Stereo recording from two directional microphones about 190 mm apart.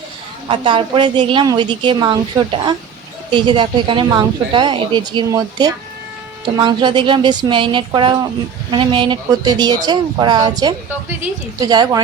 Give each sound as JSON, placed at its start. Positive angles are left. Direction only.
{"t": 0.4, "sound": "speech", "side_deg": -25}